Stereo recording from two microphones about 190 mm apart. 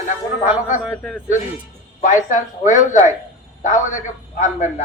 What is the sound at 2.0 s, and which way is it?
A man's voice, 40° left (ahead or behind).